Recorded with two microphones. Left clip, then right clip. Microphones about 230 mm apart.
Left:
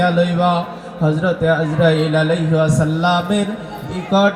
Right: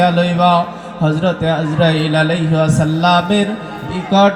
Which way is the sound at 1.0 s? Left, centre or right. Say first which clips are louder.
Even; right.